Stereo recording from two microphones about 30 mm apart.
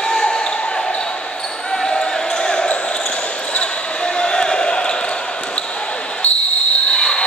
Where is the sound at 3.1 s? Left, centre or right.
Left.